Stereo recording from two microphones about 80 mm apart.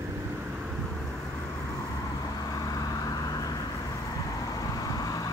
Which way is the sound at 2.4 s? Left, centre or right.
Left.